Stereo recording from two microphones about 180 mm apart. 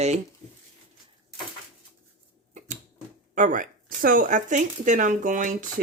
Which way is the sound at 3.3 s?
45° right (ahead or behind).